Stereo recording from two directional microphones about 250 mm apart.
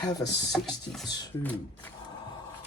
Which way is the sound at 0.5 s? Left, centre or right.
Centre.